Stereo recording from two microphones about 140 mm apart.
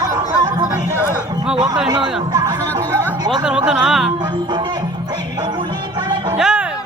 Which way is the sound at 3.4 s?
5° right (ahead or behind).